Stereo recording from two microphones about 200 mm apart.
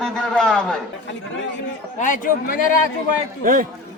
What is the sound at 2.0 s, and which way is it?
Speech, 40° left (ahead or behind).